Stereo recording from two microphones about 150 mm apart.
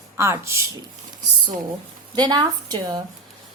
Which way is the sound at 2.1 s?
30° right (ahead or behind).